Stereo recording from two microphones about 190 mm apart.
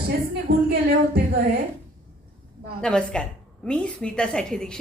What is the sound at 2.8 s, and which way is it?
A woman's voice, 5° left (ahead or behind).